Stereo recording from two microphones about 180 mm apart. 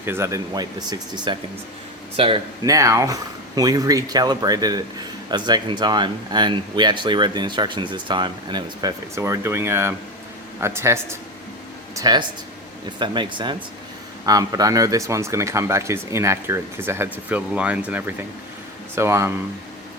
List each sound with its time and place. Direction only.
0.0 s speech: 15° right (ahead or behind); by 2.4 s 30° right (ahead or behind)
2.6 s speech: 20° right (ahead or behind)